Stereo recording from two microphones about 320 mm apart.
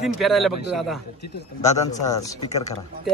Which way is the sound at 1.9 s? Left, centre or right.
Left.